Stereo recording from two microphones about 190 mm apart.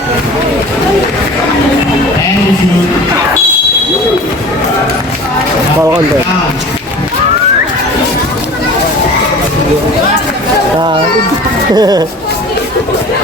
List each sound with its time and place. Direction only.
11.7 s speech: 20° right (ahead or behind)